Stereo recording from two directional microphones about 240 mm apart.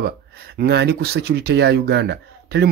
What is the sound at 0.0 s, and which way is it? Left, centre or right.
Speech, right.